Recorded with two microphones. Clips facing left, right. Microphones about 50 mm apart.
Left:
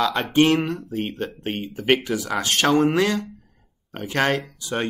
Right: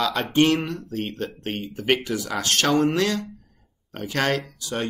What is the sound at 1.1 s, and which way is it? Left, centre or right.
Speech, centre.